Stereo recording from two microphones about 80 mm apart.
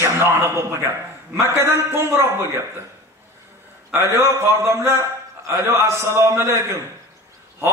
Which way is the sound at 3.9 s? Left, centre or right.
Right.